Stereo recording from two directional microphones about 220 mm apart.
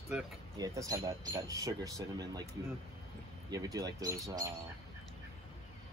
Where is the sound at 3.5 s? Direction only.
15° right (ahead or behind).